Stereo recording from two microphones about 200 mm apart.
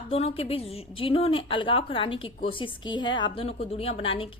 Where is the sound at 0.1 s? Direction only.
30° left (ahead or behind).